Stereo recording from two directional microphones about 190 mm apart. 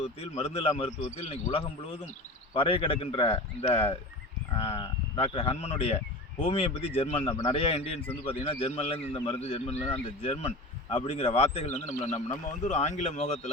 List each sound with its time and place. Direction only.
0.0 s a man's voice: 30° left (ahead or behind)
7.3 s speech: 20° left (ahead or behind)
7.5 s a man's voice: 30° left (ahead or behind)